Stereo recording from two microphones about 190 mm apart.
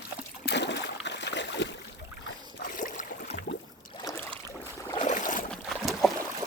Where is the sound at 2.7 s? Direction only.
45° left (ahead or behind).